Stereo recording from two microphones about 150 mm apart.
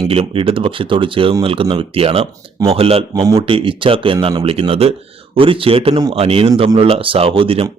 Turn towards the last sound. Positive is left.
turn(degrees=-40)  # may be behind; listen again after turning